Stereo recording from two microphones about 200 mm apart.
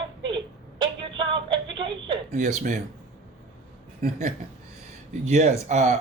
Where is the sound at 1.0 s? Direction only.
25° right (ahead or behind).